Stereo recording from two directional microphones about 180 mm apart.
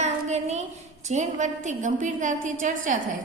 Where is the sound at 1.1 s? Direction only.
40° right (ahead or behind).